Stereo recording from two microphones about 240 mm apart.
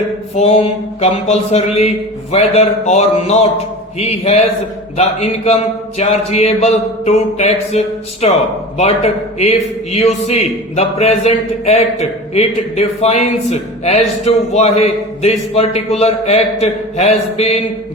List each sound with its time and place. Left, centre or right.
0.3 s a man's voice: left
9.4 s a man's voice: left